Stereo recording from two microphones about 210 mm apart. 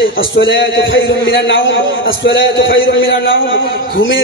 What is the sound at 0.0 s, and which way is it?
A man's voice, 65° left (ahead or behind).